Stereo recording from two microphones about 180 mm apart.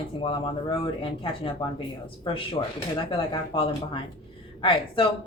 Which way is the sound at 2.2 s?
30° left (ahead or behind).